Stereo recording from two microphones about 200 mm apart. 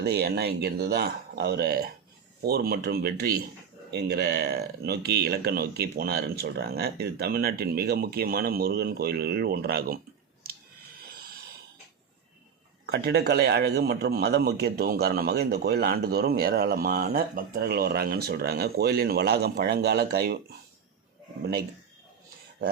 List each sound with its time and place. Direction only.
0.0 s a man's voice: 55° right (ahead or behind)
12.8 s a man's voice: 55° right (ahead or behind)